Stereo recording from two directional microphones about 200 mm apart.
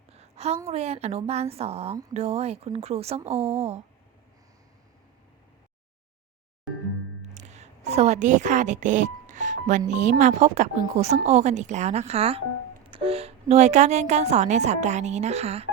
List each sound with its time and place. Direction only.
0.1 s a sound: 30° right (ahead or behind)
0.7 s a woman's voice: 30° right (ahead or behind)
7.3 s a woman's voice: 35° right (ahead or behind)